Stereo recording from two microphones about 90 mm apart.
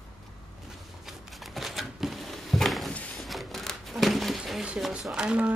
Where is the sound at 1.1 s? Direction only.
Centre (ahead or behind).